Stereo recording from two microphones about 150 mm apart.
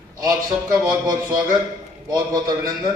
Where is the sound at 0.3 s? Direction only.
25° right (ahead or behind).